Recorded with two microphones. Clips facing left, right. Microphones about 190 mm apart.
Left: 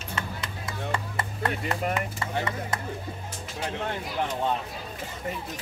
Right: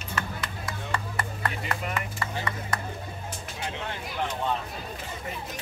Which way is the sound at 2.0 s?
25° left (ahead or behind).